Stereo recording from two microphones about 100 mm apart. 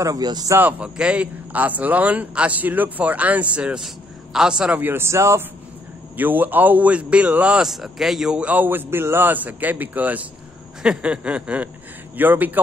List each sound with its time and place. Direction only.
0.0 s a man's voice: 40° right (ahead or behind)
0.6 s a man's voice: 15° right (ahead or behind)
6.1 s a man's voice: 20° right (ahead or behind)